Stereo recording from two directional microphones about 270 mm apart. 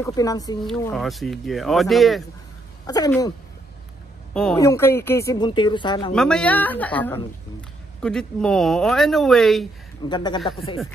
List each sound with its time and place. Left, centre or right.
0.0 s a woman's voice: centre
0.7 s speech: centre
2.9 s a woman's voice: centre
4.3 s a woman's voice: centre
6.1 s speech: centre
10.0 s a woman's voice: centre